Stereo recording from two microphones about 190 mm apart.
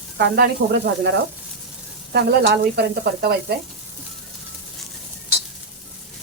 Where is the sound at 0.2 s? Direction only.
55° right (ahead or behind).